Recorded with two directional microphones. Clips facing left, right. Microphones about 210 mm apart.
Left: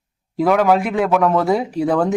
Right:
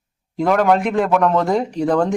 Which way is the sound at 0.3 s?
5° left (ahead or behind).